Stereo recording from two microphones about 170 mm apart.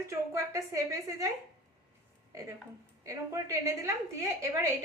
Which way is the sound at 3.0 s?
15° right (ahead or behind).